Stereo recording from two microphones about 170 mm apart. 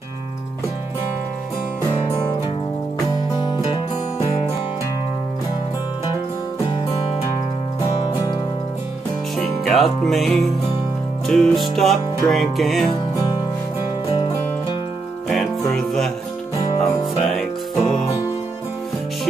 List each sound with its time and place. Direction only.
3.1 s music: 30° left (ahead or behind)
9.4 s music: centre (ahead or behind)
12.9 s music: 20° left (ahead or behind)
14.1 s music: 35° left (ahead or behind)
15.7 s music: centre (ahead or behind)